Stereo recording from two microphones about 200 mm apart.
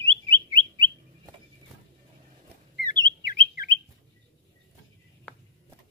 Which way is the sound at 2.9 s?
20° right (ahead or behind).